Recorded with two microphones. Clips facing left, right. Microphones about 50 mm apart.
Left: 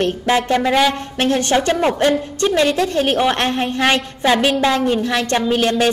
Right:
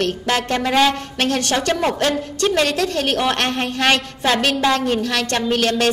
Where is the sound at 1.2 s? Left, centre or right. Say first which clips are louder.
Left 3 dB; centre.